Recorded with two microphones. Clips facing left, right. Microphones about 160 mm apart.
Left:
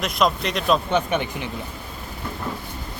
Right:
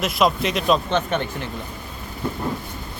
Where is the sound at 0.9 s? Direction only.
15° left (ahead or behind).